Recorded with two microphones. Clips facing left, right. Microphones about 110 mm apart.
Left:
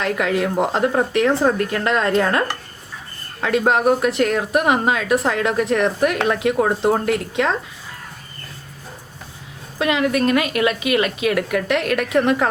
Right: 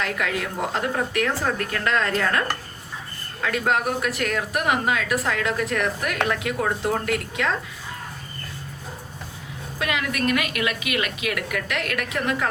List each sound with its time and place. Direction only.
0.0 s a woman's voice: 25° left (ahead or behind)
3.7 s a woman's voice: 25° left (ahead or behind)
9.7 s a woman's voice: 25° left (ahead or behind)